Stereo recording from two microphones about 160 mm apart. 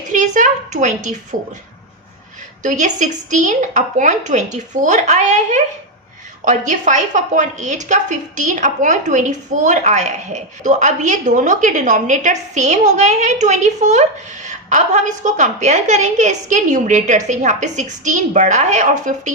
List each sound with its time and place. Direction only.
0.1 s a woman's voice: 50° right (ahead or behind)
2.6 s a woman's voice: 50° right (ahead or behind)